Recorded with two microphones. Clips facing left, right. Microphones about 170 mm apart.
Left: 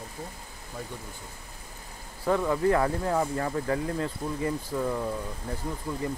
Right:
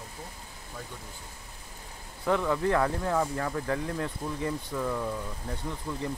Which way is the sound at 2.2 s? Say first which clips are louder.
Left 2 dB; 15° left (ahead or behind).